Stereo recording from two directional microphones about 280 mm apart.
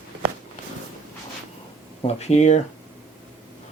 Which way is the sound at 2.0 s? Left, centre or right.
Left.